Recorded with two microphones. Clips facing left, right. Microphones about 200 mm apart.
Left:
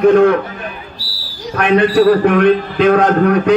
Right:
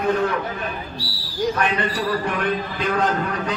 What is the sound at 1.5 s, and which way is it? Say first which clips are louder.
A man's voice: left 12 dB; 65° left (ahead or behind).